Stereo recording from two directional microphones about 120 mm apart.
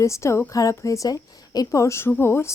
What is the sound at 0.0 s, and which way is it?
A woman's voice, 25° left (ahead or behind).